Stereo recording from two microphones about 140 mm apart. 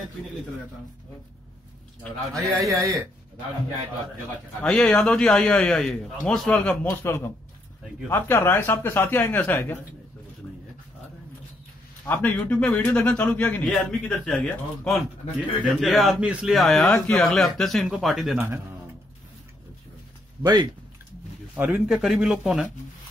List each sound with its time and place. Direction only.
2.0 s a man's voice: centre (ahead or behind)
4.6 s a man's voice: 10° left (ahead or behind)
7.0 s a man's voice: 20° left (ahead or behind)
12.1 s a man's voice: 15° left (ahead or behind)
21.5 s a man's voice: 15° right (ahead or behind)